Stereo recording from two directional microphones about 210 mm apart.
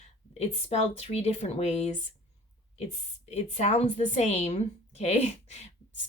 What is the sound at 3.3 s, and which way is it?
A woman's voice, 30° left (ahead or behind).